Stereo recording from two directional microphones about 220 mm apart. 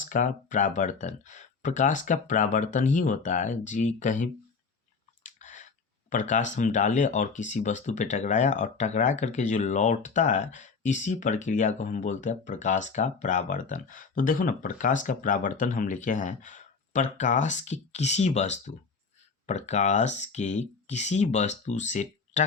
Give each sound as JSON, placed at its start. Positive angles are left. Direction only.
{"t": 0.0, "sound": "speech", "side_deg": 35}
{"t": 5.2, "sound": "chewing", "side_deg": 35}
{"t": 6.1, "sound": "speech", "side_deg": 35}